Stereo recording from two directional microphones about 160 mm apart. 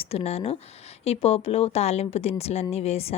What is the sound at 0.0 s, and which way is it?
A woman's voice, 40° left (ahead or behind).